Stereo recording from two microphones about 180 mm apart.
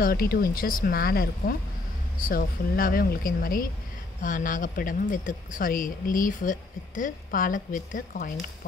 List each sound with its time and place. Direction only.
0.0 s speech: 55° left (ahead or behind)